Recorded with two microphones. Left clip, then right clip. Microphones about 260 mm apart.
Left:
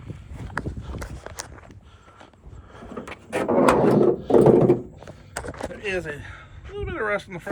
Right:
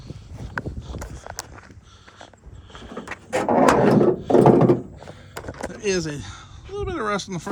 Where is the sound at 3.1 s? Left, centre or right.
Centre.